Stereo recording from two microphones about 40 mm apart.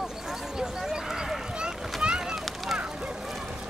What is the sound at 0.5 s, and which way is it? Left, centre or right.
Horse, centre.